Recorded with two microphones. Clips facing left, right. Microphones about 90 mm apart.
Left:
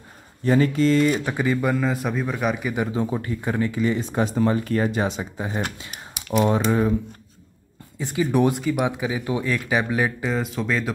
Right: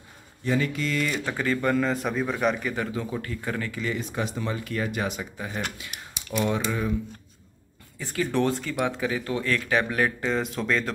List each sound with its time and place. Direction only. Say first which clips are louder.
0.5 s speech: left 8 dB; 35° left (ahead or behind)
1.2 s speech: left 3 dB; 15° left (ahead or behind)
2.9 s speech: left 6 dB; 25° left (ahead or behind)
8.0 s speech: left 5 dB; 15° left (ahead or behind)